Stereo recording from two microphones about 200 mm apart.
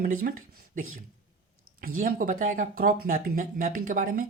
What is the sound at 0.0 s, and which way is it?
Speech, 45° right (ahead or behind).